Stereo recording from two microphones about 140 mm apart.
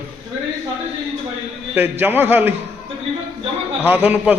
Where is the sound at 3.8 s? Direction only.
15° right (ahead or behind).